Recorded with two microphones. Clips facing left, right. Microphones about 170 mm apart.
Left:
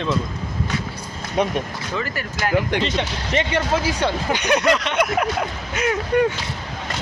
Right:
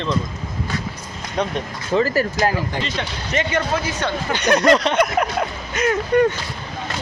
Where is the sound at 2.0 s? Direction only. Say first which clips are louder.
Right 9 dB; 35° right (ahead or behind).